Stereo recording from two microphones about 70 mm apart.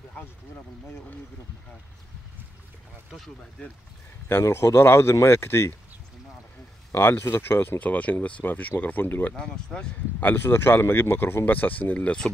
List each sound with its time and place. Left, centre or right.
4.3 s speech: left
6.9 s speech: left
9.3 s speech: centre
10.2 s speech: left